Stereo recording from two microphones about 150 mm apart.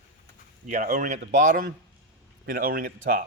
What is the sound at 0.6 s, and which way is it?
Speech, 55° right (ahead or behind).